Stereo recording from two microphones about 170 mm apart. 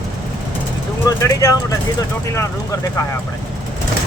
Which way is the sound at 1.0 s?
20° left (ahead or behind).